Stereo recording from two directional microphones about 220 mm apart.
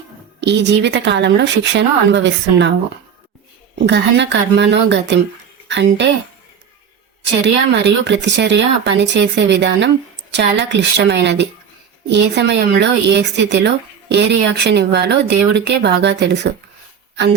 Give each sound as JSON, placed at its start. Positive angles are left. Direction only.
{"t": 0.4, "sound": "speech", "side_deg": -50}
{"t": 3.8, "sound": "speech", "side_deg": -55}
{"t": 7.4, "sound": "speech", "side_deg": -50}